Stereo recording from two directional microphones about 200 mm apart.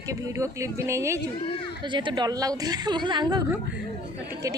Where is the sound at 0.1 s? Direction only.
15° right (ahead or behind).